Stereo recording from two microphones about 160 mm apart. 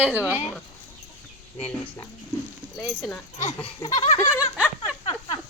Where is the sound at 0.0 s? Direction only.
10° right (ahead or behind).